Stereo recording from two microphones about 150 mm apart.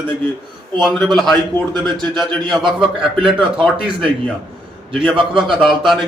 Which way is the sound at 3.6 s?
35° right (ahead or behind).